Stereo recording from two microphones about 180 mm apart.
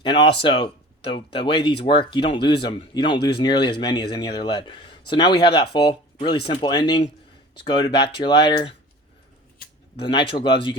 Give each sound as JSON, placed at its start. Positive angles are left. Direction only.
{"t": 0.0, "sound": "speech", "side_deg": 25}
{"t": 10.1, "sound": "speech", "side_deg": 30}